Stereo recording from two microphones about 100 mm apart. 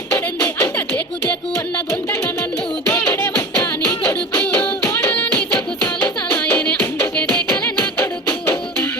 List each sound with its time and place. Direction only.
0.4 s music: 25° left (ahead or behind)
5.8 s music: 20° left (ahead or behind)
8.3 s music: 25° left (ahead or behind)